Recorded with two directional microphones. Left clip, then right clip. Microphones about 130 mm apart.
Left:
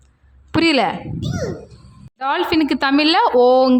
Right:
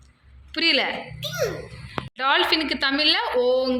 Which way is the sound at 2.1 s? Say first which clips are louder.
Left 1 dB; 40° left (ahead or behind).